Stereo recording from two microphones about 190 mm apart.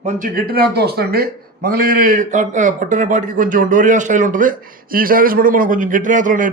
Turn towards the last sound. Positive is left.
turn(degrees=-45)  # may be behind; listen again after turning